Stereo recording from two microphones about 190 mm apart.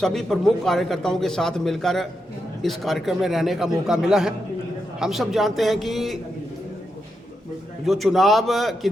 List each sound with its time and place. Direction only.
0.0 s a man's voice: centre (ahead or behind)
7.9 s a man's voice: centre (ahead or behind)